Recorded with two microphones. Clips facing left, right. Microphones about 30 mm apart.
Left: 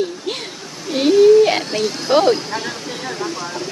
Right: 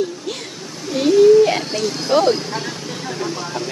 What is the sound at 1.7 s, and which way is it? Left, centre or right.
Speech, centre.